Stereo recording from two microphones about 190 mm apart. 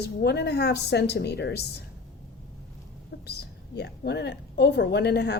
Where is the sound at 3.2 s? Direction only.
60° left (ahead or behind).